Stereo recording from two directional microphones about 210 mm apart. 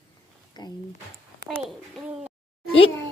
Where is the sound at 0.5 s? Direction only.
20° left (ahead or behind).